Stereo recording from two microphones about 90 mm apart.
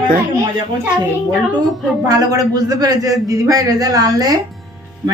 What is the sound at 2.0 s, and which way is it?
A man's voice, 40° right (ahead or behind).